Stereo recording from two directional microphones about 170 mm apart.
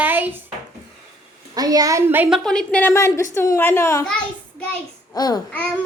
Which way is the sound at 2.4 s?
5° left (ahead or behind).